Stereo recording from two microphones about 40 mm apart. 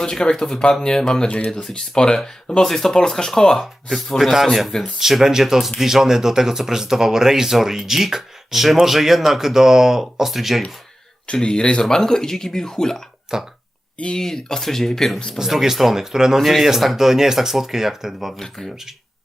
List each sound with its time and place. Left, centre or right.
0.0 s speech: centre
3.6 s speech: centre
11.3 s speech: left
13.3 s speech: centre
14.2 s speech: centre
15.4 s speech: centre
16.4 s speech: centre
18.3 s speech: centre